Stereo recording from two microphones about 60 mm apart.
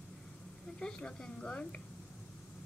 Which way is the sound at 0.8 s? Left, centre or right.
Centre.